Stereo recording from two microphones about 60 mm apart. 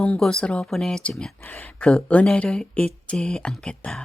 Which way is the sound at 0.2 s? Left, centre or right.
Centre.